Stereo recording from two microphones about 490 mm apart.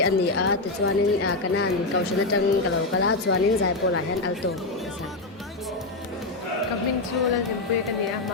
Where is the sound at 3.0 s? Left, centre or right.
Left.